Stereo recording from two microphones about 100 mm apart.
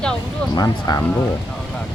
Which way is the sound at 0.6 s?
40° left (ahead or behind).